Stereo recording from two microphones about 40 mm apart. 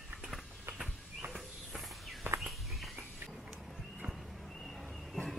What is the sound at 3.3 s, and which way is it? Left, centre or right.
Horse, centre.